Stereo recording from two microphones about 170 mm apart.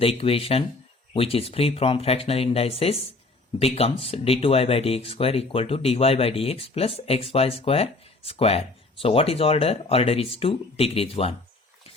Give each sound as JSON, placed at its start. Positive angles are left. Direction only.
{"t": 0.0, "sound": "speech", "side_deg": 35}